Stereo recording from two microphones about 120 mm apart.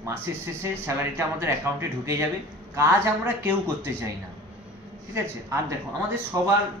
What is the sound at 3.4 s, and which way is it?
Speech, 20° right (ahead or behind).